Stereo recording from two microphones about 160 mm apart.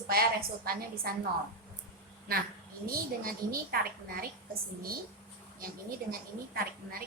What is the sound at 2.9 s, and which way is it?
A woman's voice, 65° right (ahead or behind).